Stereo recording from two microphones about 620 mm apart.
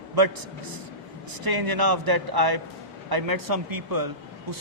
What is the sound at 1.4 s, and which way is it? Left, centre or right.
Speech, right.